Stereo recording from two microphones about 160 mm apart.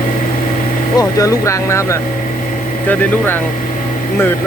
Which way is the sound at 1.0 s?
20° left (ahead or behind).